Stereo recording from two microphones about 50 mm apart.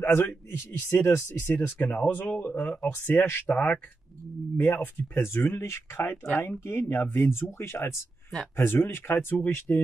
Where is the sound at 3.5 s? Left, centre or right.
Left.